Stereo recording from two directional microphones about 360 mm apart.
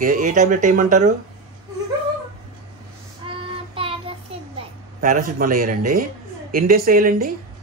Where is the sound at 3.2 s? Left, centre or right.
Centre.